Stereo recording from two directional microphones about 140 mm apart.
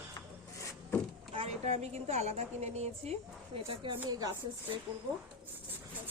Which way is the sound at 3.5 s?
40° right (ahead or behind).